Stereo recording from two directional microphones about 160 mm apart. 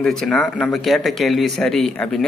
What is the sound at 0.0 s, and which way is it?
Speech, 5° left (ahead or behind).